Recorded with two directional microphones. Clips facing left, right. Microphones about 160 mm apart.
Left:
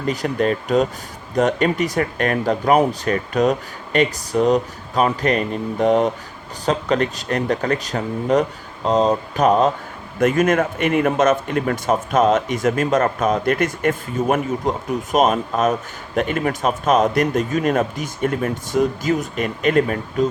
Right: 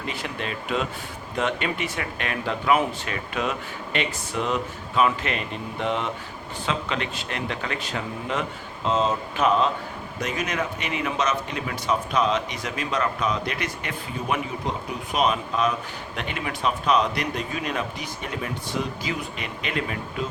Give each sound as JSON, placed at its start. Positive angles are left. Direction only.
{"t": 0.0, "sound": "speech", "side_deg": 40}